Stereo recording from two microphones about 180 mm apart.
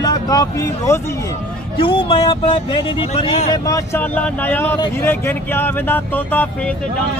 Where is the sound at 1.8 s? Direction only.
30° left (ahead or behind).